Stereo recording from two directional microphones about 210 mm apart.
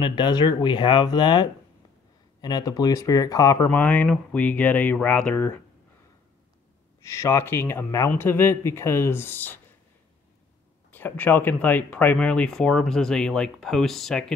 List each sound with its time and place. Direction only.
0.0 s speech: 20° left (ahead or behind)
7.1 s speech: 15° left (ahead or behind)
10.9 s speech: 10° left (ahead or behind)